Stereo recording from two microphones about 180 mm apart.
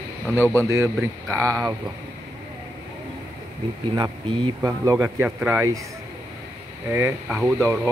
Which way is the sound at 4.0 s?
25° right (ahead or behind).